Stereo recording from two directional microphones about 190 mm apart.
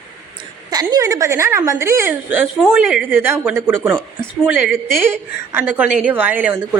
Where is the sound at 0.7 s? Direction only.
20° right (ahead or behind).